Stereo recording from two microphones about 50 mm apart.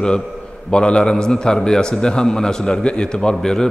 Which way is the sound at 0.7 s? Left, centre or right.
Centre.